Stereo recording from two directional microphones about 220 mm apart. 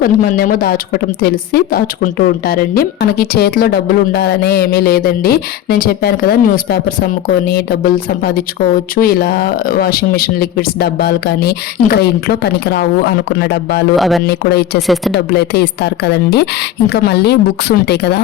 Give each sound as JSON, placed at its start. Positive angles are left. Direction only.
{"t": 0.0, "sound": "a woman's voice", "side_deg": 40}
{"t": 13.9, "sound": "a woman's voice", "side_deg": 0}
{"t": 14.3, "sound": "a woman's voice", "side_deg": 50}
{"t": 14.8, "sound": "a woman's voice", "side_deg": 0}
{"t": 15.1, "sound": "a woman's voice", "side_deg": 50}